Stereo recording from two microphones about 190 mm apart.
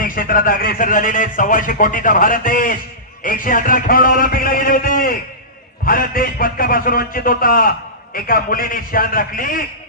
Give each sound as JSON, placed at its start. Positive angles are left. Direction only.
{"t": 0.0, "sound": "a man's voice", "side_deg": 45}